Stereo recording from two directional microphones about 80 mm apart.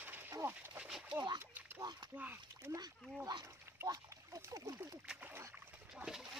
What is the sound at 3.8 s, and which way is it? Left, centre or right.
Splash, right.